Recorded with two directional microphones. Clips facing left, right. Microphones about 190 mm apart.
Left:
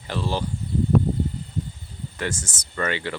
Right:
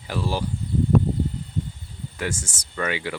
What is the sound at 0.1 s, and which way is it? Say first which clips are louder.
Speech: even; 10° right (ahead or behind).